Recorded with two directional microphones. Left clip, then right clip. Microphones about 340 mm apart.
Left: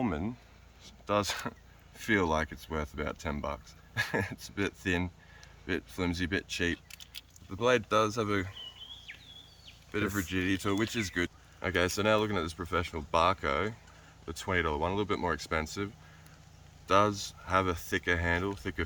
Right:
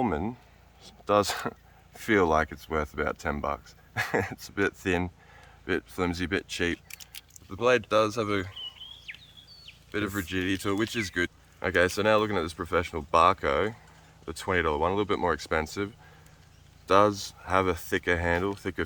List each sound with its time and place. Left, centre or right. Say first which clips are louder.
0.0 s speech: right 6 dB; centre
9.1 s a sound: right 5 dB; right
9.9 s speech: right 2 dB; centre